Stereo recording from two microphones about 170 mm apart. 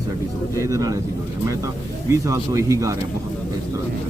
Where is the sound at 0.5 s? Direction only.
20° right (ahead or behind).